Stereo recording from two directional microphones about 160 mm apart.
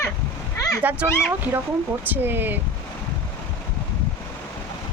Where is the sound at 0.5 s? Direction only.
20° left (ahead or behind).